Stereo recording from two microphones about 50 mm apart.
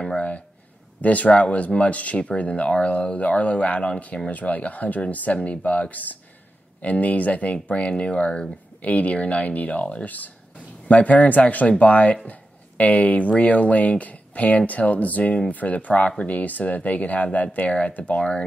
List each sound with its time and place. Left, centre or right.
1.0 s speech: left